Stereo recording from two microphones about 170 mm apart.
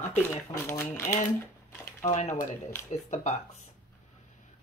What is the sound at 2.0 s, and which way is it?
Speech, 45° left (ahead or behind).